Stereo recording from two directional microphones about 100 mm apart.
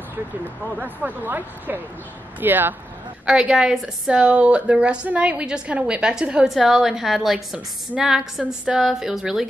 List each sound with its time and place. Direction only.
0.7 s a woman's voice: 15° right (ahead or behind)
3.3 s a woman's voice: 5° right (ahead or behind)